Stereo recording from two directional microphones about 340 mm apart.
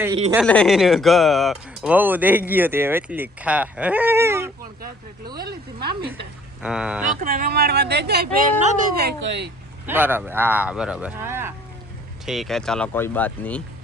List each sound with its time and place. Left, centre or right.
0.3 s speech: centre
5.4 s speech: right
6.6 s speech: centre
7.2 s speech: right
9.8 s speech: centre